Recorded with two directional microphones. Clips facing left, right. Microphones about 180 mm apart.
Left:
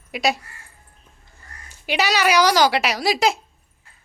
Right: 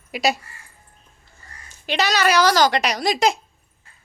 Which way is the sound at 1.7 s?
10° left (ahead or behind).